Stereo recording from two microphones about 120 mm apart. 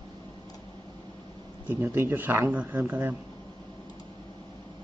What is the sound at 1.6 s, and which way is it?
Speech, 20° right (ahead or behind).